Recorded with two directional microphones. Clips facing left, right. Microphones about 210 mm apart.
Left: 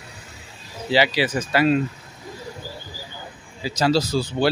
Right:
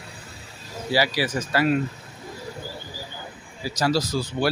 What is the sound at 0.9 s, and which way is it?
Speech, 20° left (ahead or behind).